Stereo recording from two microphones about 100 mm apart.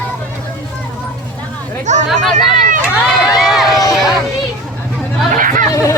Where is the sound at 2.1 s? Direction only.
5° right (ahead or behind).